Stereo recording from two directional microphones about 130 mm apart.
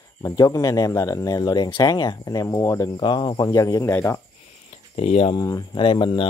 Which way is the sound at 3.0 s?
35° left (ahead or behind).